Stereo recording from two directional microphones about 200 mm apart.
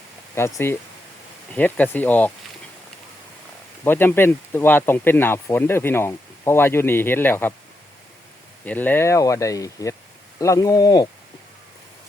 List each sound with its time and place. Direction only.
0.3 s speech: 15° left (ahead or behind)
3.8 s speech: 10° left (ahead or behind)
8.6 s speech: 10° left (ahead or behind)